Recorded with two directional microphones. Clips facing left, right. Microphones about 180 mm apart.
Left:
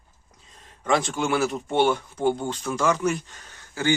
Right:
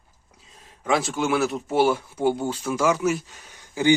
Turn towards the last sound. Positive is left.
turn(degrees=-15)  # may be behind; listen again after turning